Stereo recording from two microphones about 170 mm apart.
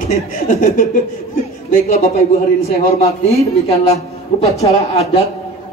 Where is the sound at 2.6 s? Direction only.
35° left (ahead or behind).